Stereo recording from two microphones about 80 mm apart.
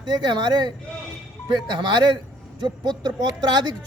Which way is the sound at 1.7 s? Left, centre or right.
Right.